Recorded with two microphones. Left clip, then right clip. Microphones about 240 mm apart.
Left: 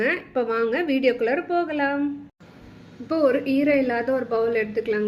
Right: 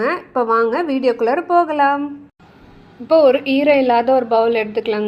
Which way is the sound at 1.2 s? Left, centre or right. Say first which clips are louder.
Right 8 dB; right.